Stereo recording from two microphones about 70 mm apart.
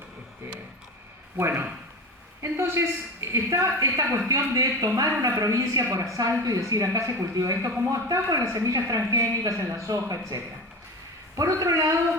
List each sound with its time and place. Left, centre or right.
1.4 s a man's voice: right